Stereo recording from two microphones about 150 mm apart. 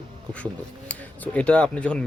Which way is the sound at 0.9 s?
10° left (ahead or behind).